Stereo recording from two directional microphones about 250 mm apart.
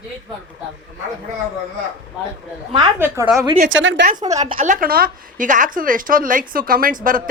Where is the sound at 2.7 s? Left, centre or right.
Centre.